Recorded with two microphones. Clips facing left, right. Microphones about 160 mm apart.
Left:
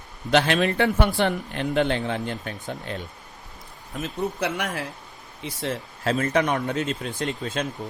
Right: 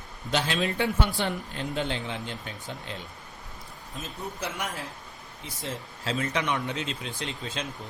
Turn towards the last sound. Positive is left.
turn(degrees=50)  # may be behind; listen again after turning